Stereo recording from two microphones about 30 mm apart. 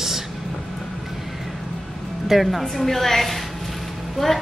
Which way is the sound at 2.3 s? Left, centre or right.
Centre.